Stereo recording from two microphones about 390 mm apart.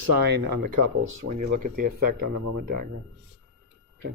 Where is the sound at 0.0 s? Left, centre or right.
Right.